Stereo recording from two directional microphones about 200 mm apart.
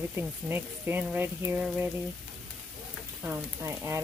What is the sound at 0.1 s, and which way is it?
Speech, 10° right (ahead or behind).